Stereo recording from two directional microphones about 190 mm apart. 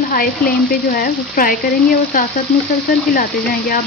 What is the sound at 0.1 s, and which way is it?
Speech, 50° left (ahead or behind).